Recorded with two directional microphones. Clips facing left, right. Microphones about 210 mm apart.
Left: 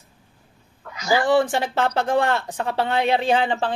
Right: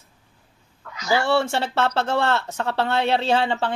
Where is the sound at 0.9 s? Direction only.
15° left (ahead or behind).